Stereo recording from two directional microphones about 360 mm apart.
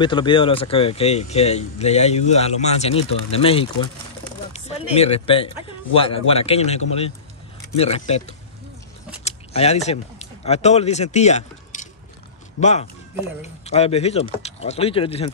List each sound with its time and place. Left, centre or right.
0.0 s speech: centre
9.2 s speech: centre